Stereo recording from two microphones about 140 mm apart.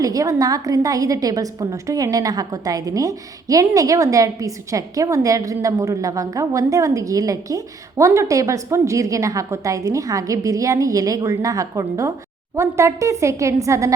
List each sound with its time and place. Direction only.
0.0 s a woman's voice: 25° right (ahead or behind)